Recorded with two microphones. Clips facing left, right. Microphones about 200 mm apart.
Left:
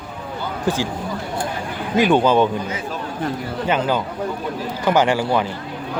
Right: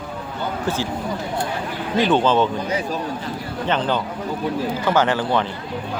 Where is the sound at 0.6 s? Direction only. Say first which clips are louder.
Left 4 dB; 15° left (ahead or behind).